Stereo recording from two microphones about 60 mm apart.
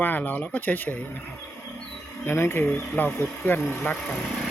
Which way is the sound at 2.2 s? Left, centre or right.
Left.